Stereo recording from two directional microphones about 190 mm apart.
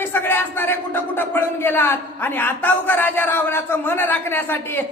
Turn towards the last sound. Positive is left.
turn(degrees=10)  # may be behind; listen again after turning